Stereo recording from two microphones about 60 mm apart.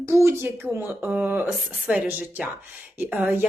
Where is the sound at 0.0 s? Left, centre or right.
Right.